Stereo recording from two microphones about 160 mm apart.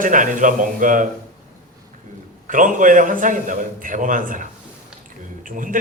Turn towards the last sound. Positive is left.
turn(degrees=-55)  # may be behind; listen again after turning